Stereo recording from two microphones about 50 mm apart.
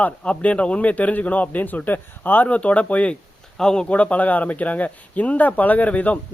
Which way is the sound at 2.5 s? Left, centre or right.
Left.